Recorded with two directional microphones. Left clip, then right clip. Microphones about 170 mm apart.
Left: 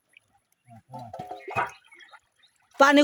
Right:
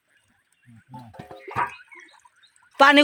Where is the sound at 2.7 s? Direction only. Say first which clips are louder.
Right 3 dB; 20° left (ahead or behind).